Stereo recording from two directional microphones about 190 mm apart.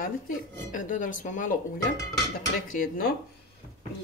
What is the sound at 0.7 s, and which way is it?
Speech, 45° left (ahead or behind).